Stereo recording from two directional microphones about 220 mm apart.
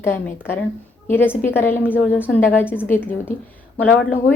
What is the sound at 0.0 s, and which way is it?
Speech, 10° left (ahead or behind).